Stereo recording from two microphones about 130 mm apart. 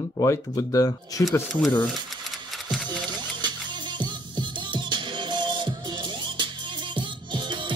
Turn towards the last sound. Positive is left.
turn(degrees=-35)  # may be behind; listen again after turning